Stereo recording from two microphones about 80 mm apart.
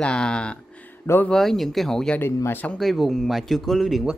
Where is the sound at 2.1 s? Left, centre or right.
Left.